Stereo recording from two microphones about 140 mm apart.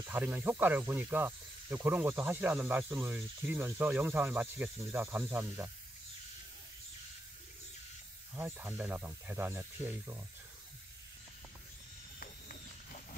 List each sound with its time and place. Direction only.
0.1 s speech: 15° right (ahead or behind)
8.4 s speech: 15° right (ahead or behind)